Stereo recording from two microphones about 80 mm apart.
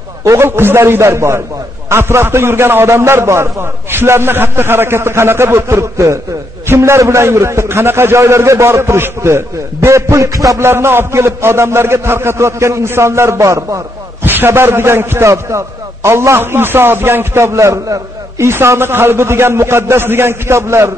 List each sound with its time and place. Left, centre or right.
0.2 s a man's voice: right
10.6 s a man's voice: right
14.2 s a man's voice: right